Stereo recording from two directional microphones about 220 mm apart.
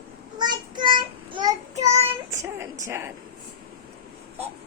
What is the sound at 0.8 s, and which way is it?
Child singing, 20° right (ahead or behind).